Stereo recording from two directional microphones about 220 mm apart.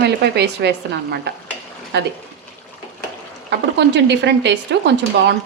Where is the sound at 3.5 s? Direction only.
50° right (ahead or behind).